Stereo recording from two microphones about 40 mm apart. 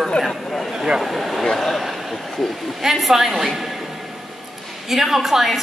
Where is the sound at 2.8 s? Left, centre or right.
Centre.